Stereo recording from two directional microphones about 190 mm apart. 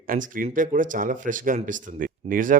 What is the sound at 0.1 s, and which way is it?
Speech, 45° right (ahead or behind).